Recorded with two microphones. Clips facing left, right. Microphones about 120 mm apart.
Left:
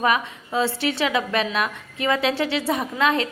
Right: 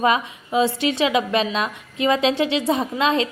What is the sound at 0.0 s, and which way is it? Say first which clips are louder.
A woman's voice: right 2 dB; 20° right (ahead or behind).